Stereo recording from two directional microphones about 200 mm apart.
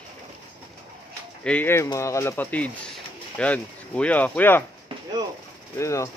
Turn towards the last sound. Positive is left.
turn(degrees=15)  # may be behind; listen again after turning